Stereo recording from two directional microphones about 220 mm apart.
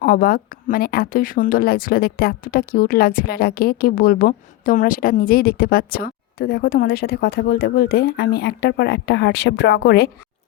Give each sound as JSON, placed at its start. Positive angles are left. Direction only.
{"t": 0.0, "sound": "a woman's voice", "side_deg": 40}